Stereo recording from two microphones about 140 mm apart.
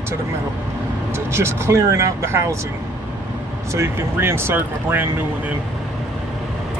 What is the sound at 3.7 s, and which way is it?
Speech, 20° right (ahead or behind).